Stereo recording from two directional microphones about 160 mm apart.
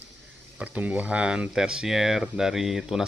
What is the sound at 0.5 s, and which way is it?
Speech, 10° right (ahead or behind).